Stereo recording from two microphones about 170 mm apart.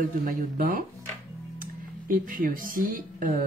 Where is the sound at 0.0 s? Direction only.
55° right (ahead or behind).